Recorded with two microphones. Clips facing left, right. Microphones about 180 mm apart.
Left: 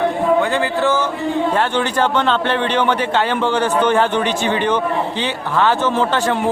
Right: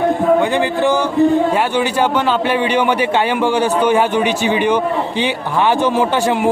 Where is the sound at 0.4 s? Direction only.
15° right (ahead or behind).